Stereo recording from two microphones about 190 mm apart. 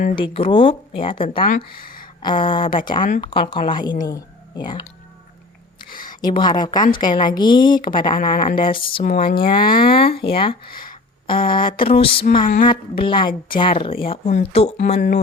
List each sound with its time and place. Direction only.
0.2 s speech: 30° left (ahead or behind)
5.9 s a sound: 45° left (ahead or behind)
6.2 s speech: 25° left (ahead or behind)
8.2 s a woman's voice: 45° left (ahead or behind)
8.5 s speech: 25° left (ahead or behind)
9.0 s a woman's voice: 45° left (ahead or behind)
10.2 s speech: 30° left (ahead or behind)
10.7 s speech: 50° left (ahead or behind)
11.3 s speech: 25° left (ahead or behind)
12.4 s a woman's voice: 45° left (ahead or behind)
13.0 s speech: 25° left (ahead or behind)